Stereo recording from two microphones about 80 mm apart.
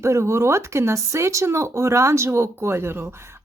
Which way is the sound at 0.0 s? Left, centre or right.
Right.